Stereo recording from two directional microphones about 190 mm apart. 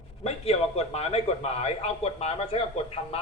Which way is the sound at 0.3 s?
35° left (ahead or behind).